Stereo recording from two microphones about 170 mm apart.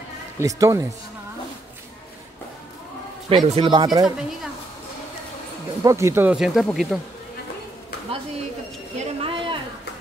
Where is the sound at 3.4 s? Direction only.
35° right (ahead or behind).